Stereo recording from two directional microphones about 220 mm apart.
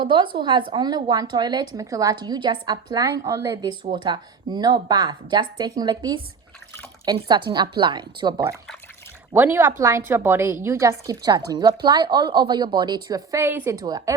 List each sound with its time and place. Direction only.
0.0 s a woman's voice: 20° right (ahead or behind)
9.3 s a woman's voice: 10° right (ahead or behind)